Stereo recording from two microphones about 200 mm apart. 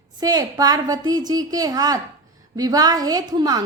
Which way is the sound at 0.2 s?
20° right (ahead or behind).